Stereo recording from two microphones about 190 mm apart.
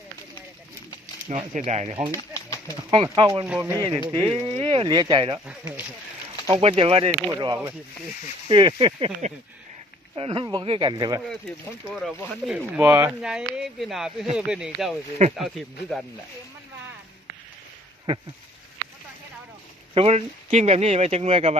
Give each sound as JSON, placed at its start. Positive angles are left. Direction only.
{"t": 1.3, "sound": "speech", "side_deg": -30}
{"t": 2.1, "sound": "a sound", "side_deg": 15}
{"t": 2.9, "sound": "speech", "side_deg": -25}
{"t": 3.4, "sound": "speech", "side_deg": -10}
{"t": 4.4, "sound": "speech", "side_deg": -30}
{"t": 5.5, "sound": "speech", "side_deg": -10}
{"t": 6.5, "sound": "speech", "side_deg": -30}
{"t": 7.1, "sound": "speech", "side_deg": -15}
{"t": 11.9, "sound": "speech", "side_deg": 0}
{"t": 19.9, "sound": "speech", "side_deg": -30}